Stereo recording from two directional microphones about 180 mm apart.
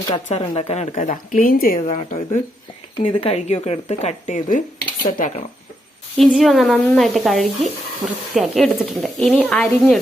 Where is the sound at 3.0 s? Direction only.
30° left (ahead or behind).